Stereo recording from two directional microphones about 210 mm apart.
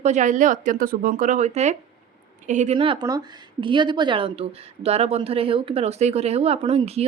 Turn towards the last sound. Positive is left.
turn(degrees=-30)  # may be behind; listen again after turning